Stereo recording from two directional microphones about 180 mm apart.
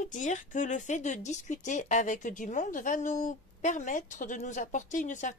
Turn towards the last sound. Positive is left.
turn(degrees=45)  # may be behind; listen again after turning